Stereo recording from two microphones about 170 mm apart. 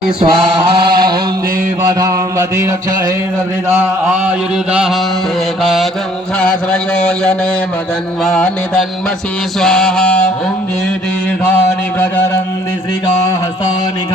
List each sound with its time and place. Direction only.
0.2 s chant: 30° right (ahead or behind)
1.8 s mantra: 20° right (ahead or behind)
4.7 s mantra: 5° right (ahead or behind)
6.4 s a sound: 5° left (ahead or behind)
8.2 s mantra: 5° left (ahead or behind)
11.9 s a sound: 15° left (ahead or behind)